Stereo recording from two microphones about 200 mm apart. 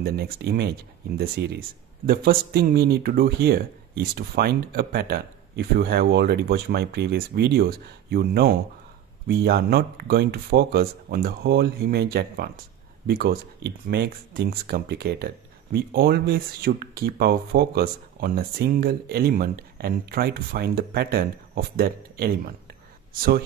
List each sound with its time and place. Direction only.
0.0 s speech: 50° right (ahead or behind)